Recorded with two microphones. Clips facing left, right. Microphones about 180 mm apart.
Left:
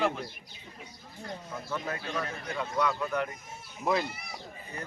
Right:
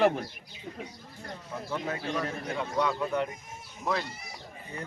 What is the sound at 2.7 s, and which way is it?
Speech, 25° right (ahead or behind).